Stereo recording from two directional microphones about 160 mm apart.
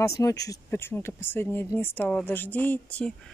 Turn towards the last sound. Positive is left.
turn(degrees=10)  # may be behind; listen again after turning